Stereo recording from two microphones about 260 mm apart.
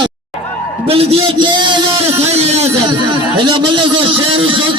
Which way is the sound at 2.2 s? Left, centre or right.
Right.